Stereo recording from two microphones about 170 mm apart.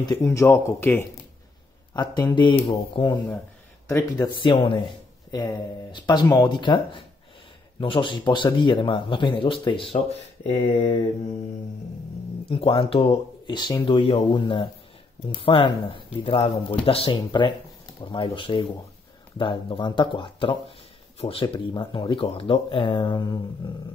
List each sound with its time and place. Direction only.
0.0 s speech: 20° left (ahead or behind)
12.4 s speech: 35° left (ahead or behind)